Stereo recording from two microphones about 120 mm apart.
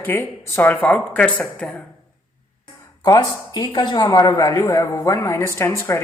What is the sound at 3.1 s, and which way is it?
Speech, 30° left (ahead or behind).